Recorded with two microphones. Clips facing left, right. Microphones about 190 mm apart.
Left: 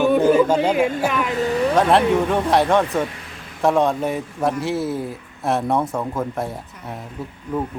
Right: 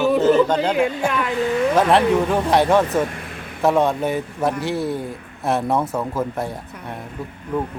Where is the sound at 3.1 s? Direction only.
55° right (ahead or behind).